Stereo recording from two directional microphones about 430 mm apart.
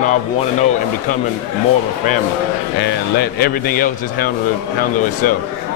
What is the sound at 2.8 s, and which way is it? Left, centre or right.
Speech, left.